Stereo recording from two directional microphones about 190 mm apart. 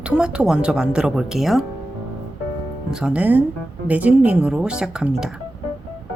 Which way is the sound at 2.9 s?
5° right (ahead or behind).